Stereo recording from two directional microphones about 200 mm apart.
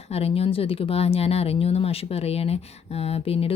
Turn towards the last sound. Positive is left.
turn(degrees=30)  # may be behind; listen again after turning